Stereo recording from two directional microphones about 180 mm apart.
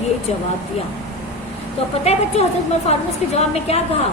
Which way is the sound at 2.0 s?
35° left (ahead or behind).